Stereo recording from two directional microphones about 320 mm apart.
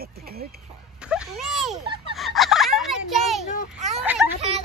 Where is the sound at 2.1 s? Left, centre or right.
Centre.